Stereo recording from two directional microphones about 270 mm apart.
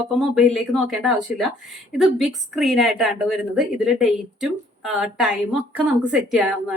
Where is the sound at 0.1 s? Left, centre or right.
Centre.